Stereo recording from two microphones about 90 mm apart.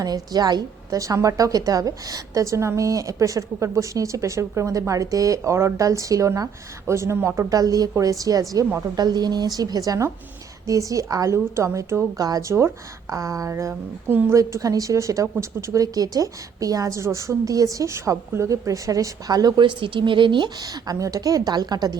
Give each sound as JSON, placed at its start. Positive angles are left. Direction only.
{"t": 0.0, "sound": "a woman's voice", "side_deg": -45}
{"t": 7.6, "sound": "a woman's voice", "side_deg": -40}
{"t": 19.6, "sound": "a woman's voice", "side_deg": -65}